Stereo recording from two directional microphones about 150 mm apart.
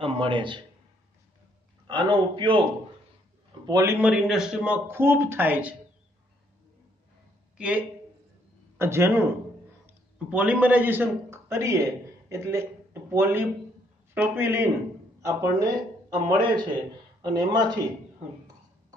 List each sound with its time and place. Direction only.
0.0 s a man's voice: 35° right (ahead or behind)
1.9 s a man's voice: 30° right (ahead or behind)
3.6 s a man's voice: 25° right (ahead or behind)
4.0 s speech: 5° right (ahead or behind)
7.5 s a man's voice: 10° right (ahead or behind); by 17.7 s 30° right (ahead or behind)